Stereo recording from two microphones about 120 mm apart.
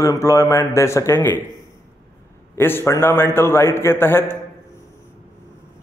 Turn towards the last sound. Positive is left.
turn(degrees=20)  # may be behind; listen again after turning